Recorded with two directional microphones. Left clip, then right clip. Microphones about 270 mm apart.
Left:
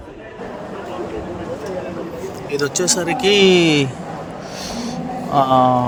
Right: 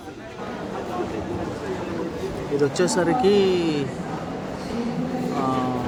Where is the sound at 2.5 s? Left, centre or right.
Left.